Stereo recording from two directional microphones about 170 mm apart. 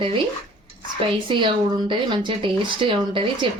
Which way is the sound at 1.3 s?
30° right (ahead or behind).